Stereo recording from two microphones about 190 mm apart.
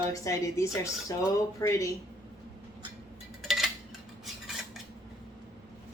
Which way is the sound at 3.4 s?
Centre (ahead or behind).